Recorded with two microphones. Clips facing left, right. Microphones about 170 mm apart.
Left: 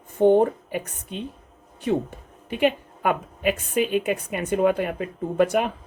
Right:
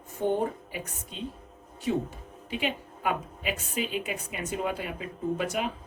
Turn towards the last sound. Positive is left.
turn(degrees=60)  # may be behind; listen again after turning